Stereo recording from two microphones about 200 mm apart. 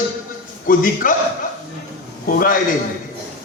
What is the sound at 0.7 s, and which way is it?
Speech, 45° left (ahead or behind).